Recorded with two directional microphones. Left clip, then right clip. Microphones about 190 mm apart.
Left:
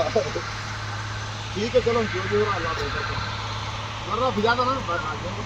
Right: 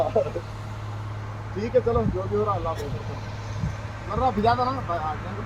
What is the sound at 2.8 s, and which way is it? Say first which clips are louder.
Vehicle: left 8 dB; 30° left (ahead or behind).